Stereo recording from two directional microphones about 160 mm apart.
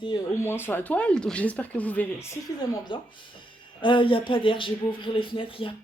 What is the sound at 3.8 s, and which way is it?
Speech, 30° left (ahead or behind).